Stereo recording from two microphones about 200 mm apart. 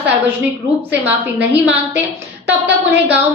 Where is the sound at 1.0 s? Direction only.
5° right (ahead or behind).